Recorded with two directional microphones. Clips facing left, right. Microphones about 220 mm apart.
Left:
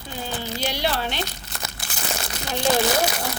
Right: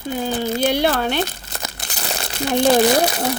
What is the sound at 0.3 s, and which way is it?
Speech, 45° right (ahead or behind).